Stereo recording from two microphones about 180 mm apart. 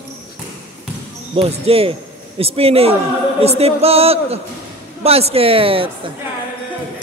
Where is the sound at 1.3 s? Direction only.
30° right (ahead or behind).